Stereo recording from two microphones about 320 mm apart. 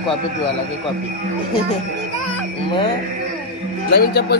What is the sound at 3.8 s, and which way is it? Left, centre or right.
Speech, left.